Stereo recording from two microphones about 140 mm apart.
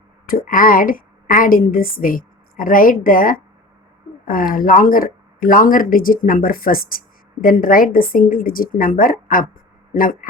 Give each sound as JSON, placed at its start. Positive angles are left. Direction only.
{"t": 0.3, "sound": "a woman's voice", "side_deg": 85}